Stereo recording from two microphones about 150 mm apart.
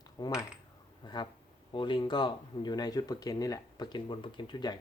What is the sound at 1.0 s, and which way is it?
Speech, 30° left (ahead or behind).